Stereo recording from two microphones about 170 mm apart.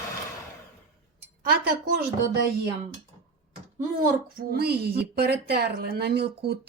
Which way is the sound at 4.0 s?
60° right (ahead or behind).